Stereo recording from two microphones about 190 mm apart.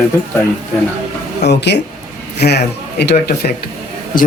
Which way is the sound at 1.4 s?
60° left (ahead or behind).